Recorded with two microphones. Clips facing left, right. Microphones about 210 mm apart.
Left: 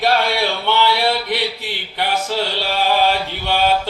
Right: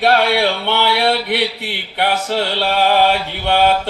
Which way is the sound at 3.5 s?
60° right (ahead or behind).